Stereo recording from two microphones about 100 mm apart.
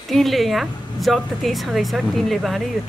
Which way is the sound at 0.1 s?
Centre (ahead or behind).